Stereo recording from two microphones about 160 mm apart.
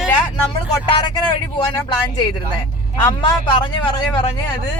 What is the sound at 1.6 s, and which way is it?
Speech, 25° left (ahead or behind).